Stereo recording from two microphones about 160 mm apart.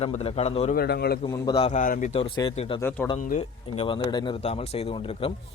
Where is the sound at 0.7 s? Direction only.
85° left.